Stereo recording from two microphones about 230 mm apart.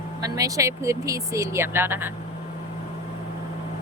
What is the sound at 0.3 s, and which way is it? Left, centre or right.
Speech, centre.